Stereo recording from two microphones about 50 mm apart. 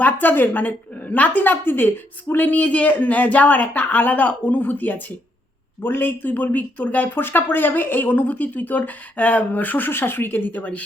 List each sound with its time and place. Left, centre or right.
0.0 s speech: left